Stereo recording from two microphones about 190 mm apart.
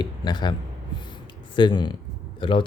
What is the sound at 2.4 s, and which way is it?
Speech, 25° left (ahead or behind).